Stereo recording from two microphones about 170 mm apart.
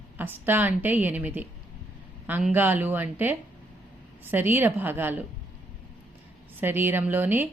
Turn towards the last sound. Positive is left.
turn(degrees=-10)  # may be behind; listen again after turning